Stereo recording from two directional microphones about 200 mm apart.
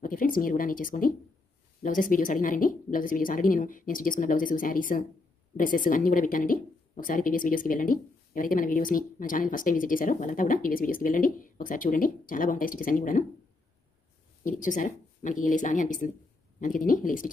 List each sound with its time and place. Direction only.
0.0 s a woman's voice: 45° left (ahead or behind)
14.4 s speech: 40° left (ahead or behind)